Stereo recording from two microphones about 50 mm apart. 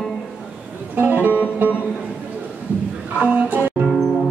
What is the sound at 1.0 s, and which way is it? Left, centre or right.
Music, right.